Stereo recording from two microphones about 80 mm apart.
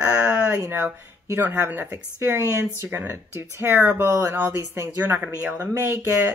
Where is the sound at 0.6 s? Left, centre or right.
Right.